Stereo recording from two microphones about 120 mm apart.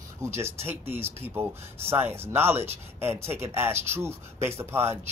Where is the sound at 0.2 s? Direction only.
20° right (ahead or behind).